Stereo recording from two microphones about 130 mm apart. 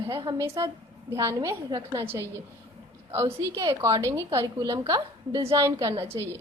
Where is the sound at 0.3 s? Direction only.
35° right (ahead or behind).